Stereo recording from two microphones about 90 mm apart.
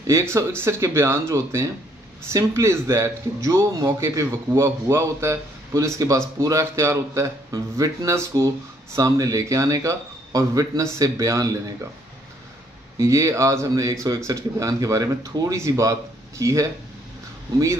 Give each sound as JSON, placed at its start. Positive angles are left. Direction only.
{"t": 0.0, "sound": "a man's voice", "side_deg": -35}
{"t": 12.9, "sound": "a man's voice", "side_deg": -35}